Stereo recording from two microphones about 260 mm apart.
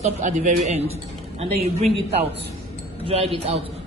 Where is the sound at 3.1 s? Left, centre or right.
Right.